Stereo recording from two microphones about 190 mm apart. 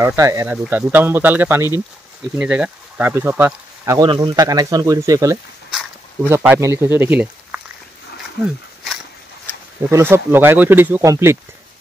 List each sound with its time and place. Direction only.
0.0 s speech: 15° right (ahead or behind)
5.7 s a sound: 5° right (ahead or behind)
6.3 s speech: 10° right (ahead or behind)
9.8 s speech: 15° right (ahead or behind)